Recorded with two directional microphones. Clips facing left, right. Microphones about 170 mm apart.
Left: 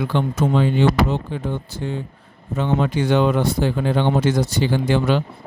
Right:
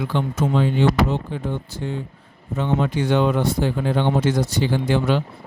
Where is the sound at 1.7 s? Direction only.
90° left.